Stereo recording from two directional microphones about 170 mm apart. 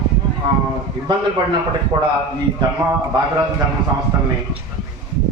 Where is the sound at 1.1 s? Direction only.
30° right (ahead or behind).